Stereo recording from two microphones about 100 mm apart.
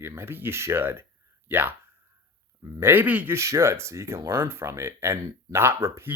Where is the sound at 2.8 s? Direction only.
20° right (ahead or behind).